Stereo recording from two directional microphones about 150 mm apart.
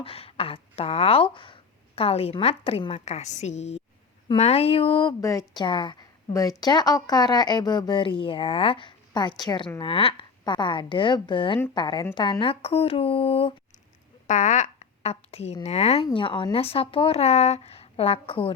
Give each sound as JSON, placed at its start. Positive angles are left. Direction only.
{"t": 0.0, "sound": "a woman's voice", "side_deg": 40}
{"t": 5.2, "sound": "a woman's voice", "side_deg": 20}
{"t": 14.3, "sound": "a woman's voice", "side_deg": 55}
{"t": 16.1, "sound": "a woman's voice", "side_deg": 35}